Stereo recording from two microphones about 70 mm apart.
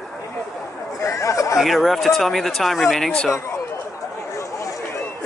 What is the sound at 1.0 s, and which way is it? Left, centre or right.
Chatter, left.